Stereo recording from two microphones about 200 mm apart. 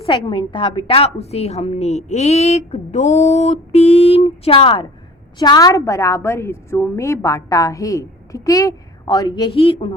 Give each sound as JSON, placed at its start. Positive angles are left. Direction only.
{"t": 0.0, "sound": "a woman's voice", "side_deg": 25}